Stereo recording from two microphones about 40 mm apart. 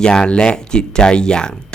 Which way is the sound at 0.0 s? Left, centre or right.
Centre.